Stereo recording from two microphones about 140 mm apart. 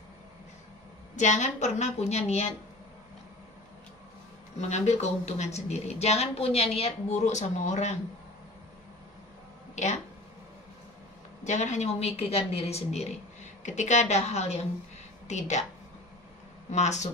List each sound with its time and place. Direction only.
1.1 s a woman's voice: 55° left (ahead or behind)
4.6 s a woman's voice: 55° left (ahead or behind)
11.4 s a woman's voice: 60° left (ahead or behind)
16.7 s a woman's voice: 55° left (ahead or behind)